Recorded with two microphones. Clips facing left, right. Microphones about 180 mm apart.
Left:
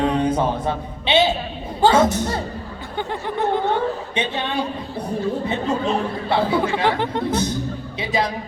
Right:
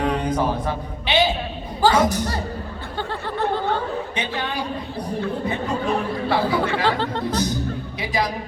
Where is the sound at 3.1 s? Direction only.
15° left (ahead or behind).